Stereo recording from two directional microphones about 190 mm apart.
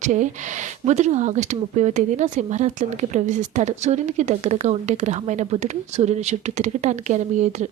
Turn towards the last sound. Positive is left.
turn(degrees=-40)  # may be behind; listen again after turning